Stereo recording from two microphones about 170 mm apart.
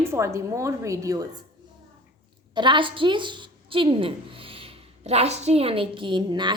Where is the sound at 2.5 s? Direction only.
25° right (ahead or behind).